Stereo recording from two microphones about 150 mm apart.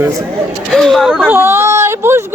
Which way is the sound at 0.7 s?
Centre (ahead or behind).